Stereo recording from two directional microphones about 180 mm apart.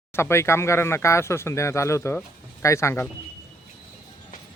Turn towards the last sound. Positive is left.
turn(degrees=15)  # may be behind; listen again after turning